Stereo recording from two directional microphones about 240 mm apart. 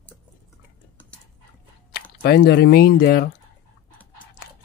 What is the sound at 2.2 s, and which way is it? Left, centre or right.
Speech, left.